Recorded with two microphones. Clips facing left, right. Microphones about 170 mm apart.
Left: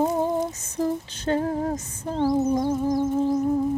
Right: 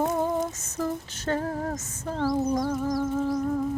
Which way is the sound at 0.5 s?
35° left (ahead or behind).